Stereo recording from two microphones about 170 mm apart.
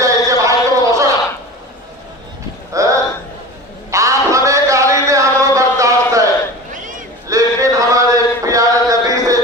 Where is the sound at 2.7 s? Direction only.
20° right (ahead or behind).